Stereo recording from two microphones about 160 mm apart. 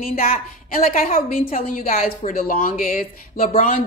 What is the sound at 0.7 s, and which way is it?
Speech, 60° left (ahead or behind).